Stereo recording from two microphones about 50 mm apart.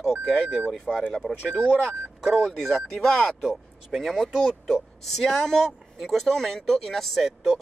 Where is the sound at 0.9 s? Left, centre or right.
Centre.